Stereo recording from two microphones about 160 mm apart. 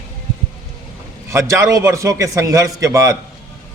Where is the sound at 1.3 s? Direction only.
20° right (ahead or behind).